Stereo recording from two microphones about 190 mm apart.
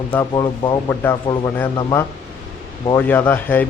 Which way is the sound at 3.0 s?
10° left (ahead or behind).